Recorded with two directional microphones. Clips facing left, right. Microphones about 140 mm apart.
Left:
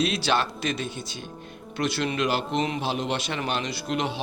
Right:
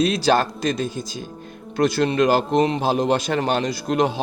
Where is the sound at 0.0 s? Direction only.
40° right (ahead or behind).